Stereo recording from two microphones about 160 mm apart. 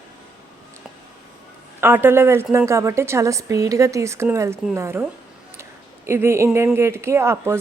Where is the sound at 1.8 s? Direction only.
15° right (ahead or behind).